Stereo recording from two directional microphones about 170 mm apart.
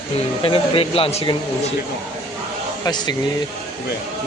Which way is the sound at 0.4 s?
30° left (ahead or behind).